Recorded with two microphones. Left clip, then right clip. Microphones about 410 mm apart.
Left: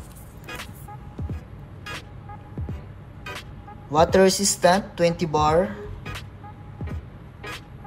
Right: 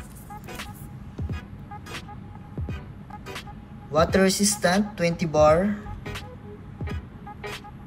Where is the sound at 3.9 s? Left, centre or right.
Centre.